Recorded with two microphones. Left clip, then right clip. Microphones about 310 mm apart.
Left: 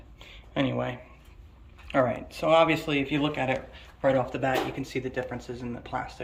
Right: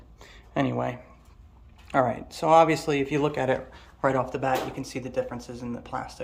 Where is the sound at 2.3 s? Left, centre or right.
Centre.